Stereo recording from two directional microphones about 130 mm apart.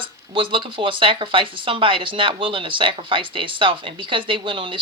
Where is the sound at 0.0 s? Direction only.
40° right (ahead or behind).